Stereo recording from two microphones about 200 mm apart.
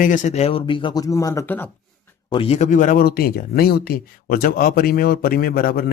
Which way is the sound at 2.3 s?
30° left (ahead or behind).